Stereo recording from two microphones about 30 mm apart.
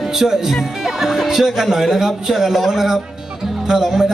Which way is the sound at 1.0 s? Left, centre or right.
Centre.